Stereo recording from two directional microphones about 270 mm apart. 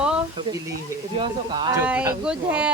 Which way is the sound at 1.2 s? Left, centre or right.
Centre.